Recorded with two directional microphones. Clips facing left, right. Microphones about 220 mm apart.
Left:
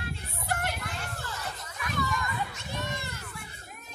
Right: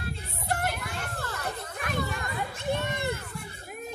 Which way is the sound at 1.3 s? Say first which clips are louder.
Right 5 dB; 55° right (ahead or behind).